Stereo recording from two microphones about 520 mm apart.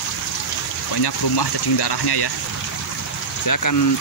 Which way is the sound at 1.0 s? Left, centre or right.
Left.